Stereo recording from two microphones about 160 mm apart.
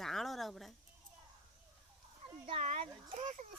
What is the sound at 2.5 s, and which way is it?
Speech, 40° right (ahead or behind).